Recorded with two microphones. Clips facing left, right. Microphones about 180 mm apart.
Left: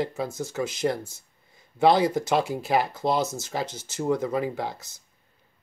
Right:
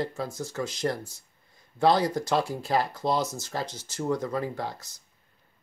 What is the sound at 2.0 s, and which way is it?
Speech, 5° left (ahead or behind).